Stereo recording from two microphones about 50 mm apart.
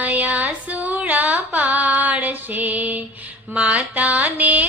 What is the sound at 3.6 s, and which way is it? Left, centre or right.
Music, right.